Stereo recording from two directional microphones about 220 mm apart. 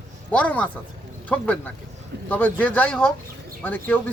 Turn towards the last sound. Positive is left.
turn(degrees=10)  # may be behind; listen again after turning